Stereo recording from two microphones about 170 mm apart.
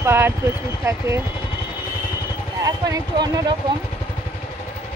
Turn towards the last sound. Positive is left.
turn(degrees=-25)  # may be behind; listen again after turning